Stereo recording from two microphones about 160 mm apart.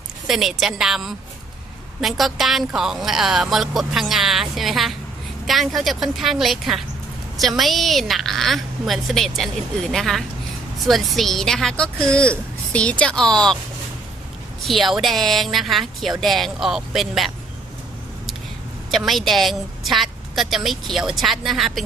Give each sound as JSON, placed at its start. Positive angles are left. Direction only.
{"t": 0.3, "sound": "a woman's voice", "side_deg": 0}
{"t": 14.6, "sound": "a woman's voice", "side_deg": 0}
{"t": 18.9, "sound": "a woman's voice", "side_deg": 0}